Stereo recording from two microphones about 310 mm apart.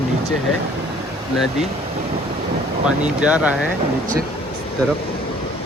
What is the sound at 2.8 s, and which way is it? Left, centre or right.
Speech, centre.